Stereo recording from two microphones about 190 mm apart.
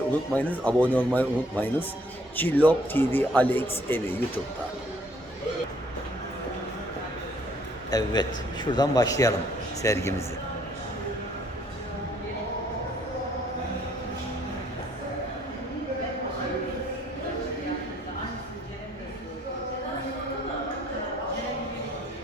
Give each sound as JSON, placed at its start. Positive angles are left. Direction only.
{"t": 0.3, "sound": "speech", "side_deg": 10}
{"t": 7.9, "sound": "a man's voice", "side_deg": 20}